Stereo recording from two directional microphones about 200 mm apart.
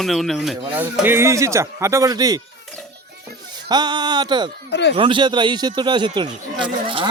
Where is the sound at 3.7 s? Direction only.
20° right (ahead or behind).